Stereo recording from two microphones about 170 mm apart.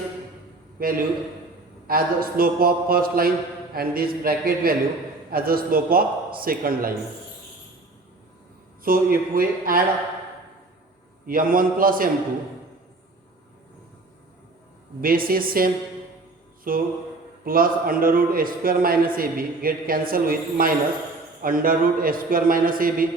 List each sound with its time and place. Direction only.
0.8 s a man's voice: 55° right (ahead or behind)
8.8 s a man's voice: 55° right (ahead or behind)
11.3 s a man's voice: 55° right (ahead or behind)
15.0 s a man's voice: 55° right (ahead or behind)